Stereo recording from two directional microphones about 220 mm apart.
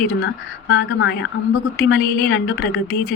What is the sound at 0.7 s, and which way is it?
A woman's voice, 50° left (ahead or behind).